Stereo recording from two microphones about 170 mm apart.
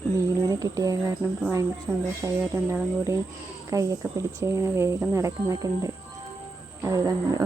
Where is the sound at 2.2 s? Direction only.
10° left (ahead or behind).